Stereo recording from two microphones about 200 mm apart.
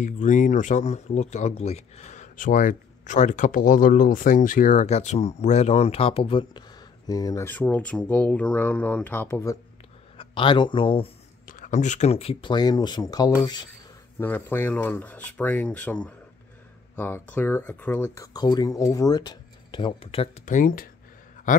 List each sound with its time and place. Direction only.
0.0 s speech: 40° left (ahead or behind); by 9.6 s 15° left (ahead or behind)
10.1 s speech: 25° left (ahead or behind)
11.4 s speech: 40° left (ahead or behind); by 13.7 s 20° left (ahead or behind)
14.2 s speech: 10° left (ahead or behind); by 20.9 s 45° left (ahead or behind)